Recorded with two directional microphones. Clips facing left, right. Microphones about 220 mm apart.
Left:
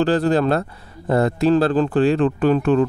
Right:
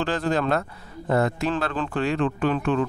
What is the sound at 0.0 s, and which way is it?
Speech, 35° left (ahead or behind).